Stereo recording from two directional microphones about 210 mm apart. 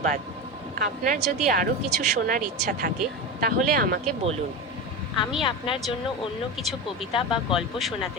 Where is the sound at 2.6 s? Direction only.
45° right (ahead or behind).